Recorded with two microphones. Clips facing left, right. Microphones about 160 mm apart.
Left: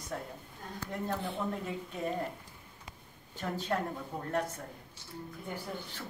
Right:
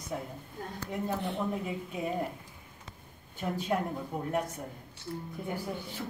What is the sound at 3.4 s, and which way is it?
A woman's voice, 10° right (ahead or behind).